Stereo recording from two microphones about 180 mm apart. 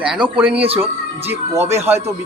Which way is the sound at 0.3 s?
10° right (ahead or behind).